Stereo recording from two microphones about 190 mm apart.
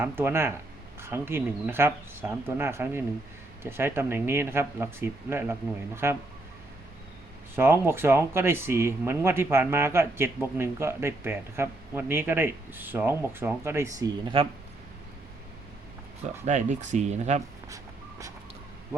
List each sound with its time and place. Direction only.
0.0 s a man's voice: 10° right (ahead or behind)
7.5 s a man's voice: 10° right (ahead or behind)
16.5 s speech: 40° right (ahead or behind)